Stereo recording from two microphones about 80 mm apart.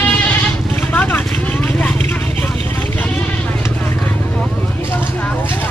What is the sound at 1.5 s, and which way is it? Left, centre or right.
Vehicle, left.